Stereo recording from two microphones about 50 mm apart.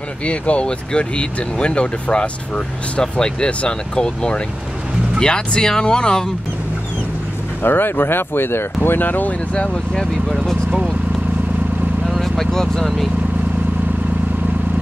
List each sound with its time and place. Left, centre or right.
0.2 s speech: left
7.6 s speech: left
9.5 s speech: left
10.2 s speech: centre
12.1 s vehicle: centre